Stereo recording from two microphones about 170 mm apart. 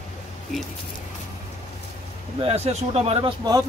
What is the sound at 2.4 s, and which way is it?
Speech, 40° right (ahead or behind).